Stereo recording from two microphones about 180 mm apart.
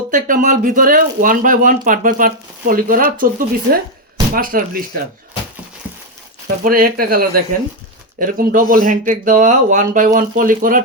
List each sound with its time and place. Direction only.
0.1 s speech: 45° right (ahead or behind)
6.7 s speech: 55° right (ahead or behind)